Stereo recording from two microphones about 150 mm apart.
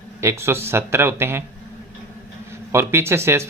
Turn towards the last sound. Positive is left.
turn(degrees=-20)  # may be behind; listen again after turning